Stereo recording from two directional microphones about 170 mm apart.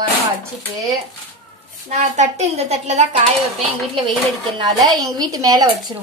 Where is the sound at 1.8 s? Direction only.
40° right (ahead or behind).